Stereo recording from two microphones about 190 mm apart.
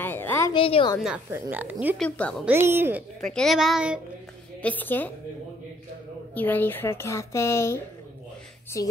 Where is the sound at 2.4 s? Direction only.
10° right (ahead or behind).